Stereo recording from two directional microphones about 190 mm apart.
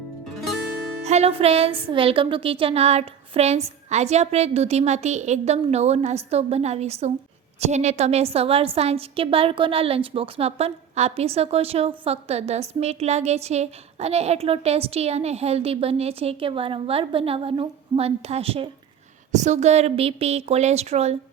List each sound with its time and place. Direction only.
1.0 s a woman's voice: 35° right (ahead or behind)